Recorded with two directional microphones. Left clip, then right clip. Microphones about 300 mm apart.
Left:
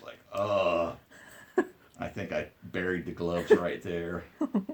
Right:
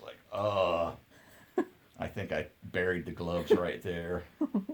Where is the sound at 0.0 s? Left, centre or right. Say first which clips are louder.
Left 1 dB; right.